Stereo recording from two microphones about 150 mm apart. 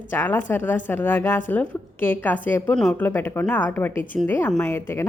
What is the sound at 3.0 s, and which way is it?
Speech, 15° left (ahead or behind).